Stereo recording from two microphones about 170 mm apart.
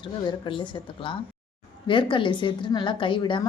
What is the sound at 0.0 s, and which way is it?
A woman's voice, 30° left (ahead or behind).